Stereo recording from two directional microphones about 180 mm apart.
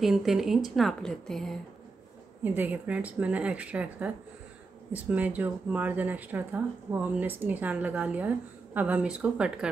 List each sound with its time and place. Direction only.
0.0 s speech: centre (ahead or behind)
2.4 s speech: 10° right (ahead or behind)